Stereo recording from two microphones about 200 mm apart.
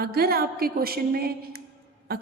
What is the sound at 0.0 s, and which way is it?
A woman's voice, 50° right (ahead or behind).